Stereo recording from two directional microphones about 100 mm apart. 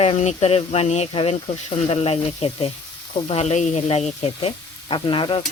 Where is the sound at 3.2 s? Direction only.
80° left; by 5.4 s 55° left (ahead or behind).